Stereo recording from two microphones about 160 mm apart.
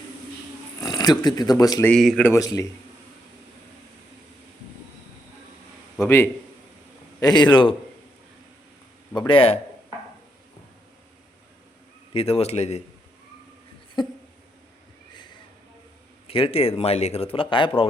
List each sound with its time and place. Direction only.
0.8 s speech: 25° left (ahead or behind)
1.8 s speech: 5° left (ahead or behind)
2.2 s a man's voice: 20° left (ahead or behind)
7.2 s a man's voice: 25° left (ahead or behind)
9.1 s speech: 30° left (ahead or behind)
12.1 s speech: 40° left (ahead or behind)
14.0 s a man's voice: 30° left (ahead or behind)
15.1 s a sound: 30° left (ahead or behind)
16.2 s speech: 35° left (ahead or behind)